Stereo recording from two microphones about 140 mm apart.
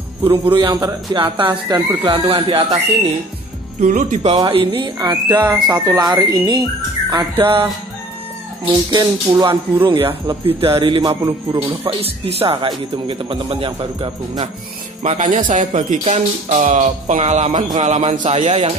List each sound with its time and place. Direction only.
0.2 s speech: 40° right (ahead or behind)
3.8 s speech: 65° right (ahead or behind)
4.4 s speech: 35° right (ahead or behind)
8.9 s music: 30° right (ahead or behind)
9.8 s speech: 40° right (ahead or behind)
11.2 s music: 25° right (ahead or behind)
11.8 s speech: 45° right (ahead or behind)
15.1 s speech: 65° right (ahead or behind)